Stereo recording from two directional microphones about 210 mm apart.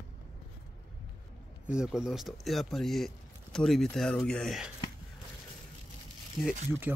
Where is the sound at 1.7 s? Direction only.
5° right (ahead or behind).